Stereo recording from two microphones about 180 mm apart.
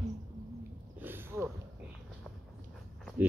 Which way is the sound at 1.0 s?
10° right (ahead or behind).